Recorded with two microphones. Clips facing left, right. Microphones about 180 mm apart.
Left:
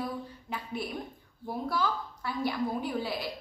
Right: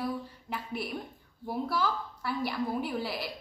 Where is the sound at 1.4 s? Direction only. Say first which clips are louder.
Even; 5° right (ahead or behind).